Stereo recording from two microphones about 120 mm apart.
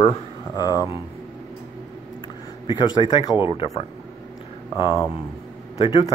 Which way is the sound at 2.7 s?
40° left (ahead or behind).